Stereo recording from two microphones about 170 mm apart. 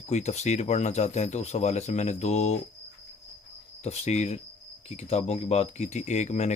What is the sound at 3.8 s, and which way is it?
Speech, 40° left (ahead or behind).